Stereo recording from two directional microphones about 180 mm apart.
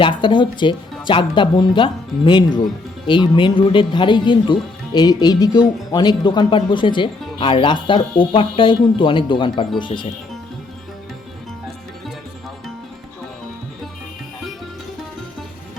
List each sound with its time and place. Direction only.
0.0 s speech: 25° left (ahead or behind)